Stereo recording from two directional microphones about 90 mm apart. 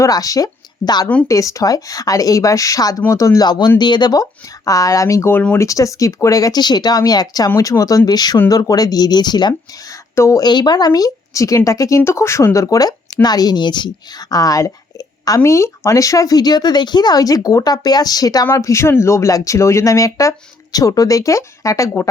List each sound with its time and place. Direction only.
0.0 s a woman's voice: 40° left (ahead or behind)
3.4 s speech: 50° left (ahead or behind); by 5.3 s 35° left (ahead or behind)
5.3 s speech: 15° left (ahead or behind)
5.5 s speech: 35° left (ahead or behind)
10.2 s speech: 35° left (ahead or behind)
10.4 s speech: 50° left (ahead or behind)
13.2 s a woman's voice: 50° left (ahead or behind)
18.4 s speech: 35° left (ahead or behind)